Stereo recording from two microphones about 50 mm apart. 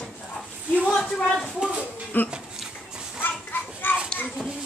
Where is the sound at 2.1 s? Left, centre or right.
Left.